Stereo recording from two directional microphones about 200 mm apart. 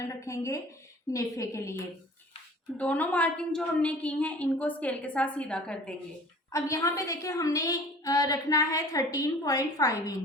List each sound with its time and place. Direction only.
0.1 s a woman's voice: 15° left (ahead or behind)
6.5 s a woman's voice: 15° left (ahead or behind)